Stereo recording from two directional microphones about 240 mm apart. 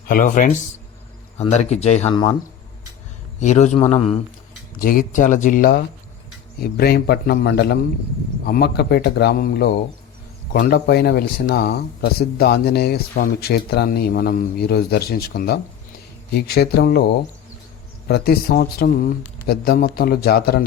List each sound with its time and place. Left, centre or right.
0.1 s speech: left
3.4 s speech: left
4.8 s speech: left